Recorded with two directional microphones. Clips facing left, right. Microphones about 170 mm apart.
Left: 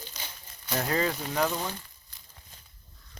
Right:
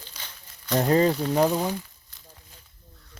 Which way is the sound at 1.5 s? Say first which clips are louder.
Right 7 dB; 10° right (ahead or behind).